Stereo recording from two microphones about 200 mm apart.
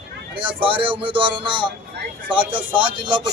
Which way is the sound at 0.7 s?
25° right (ahead or behind).